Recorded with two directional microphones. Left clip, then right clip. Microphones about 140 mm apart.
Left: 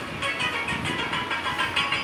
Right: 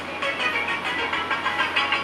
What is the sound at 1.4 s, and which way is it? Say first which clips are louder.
Vehicle: right 2 dB; 35° right (ahead or behind).